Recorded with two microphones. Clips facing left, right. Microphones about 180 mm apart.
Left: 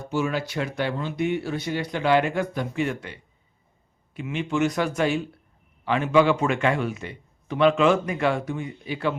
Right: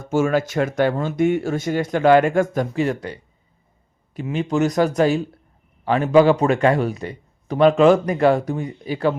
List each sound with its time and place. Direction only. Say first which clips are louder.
0.1 s a man's voice: right 7 dB; 45° right (ahead or behind)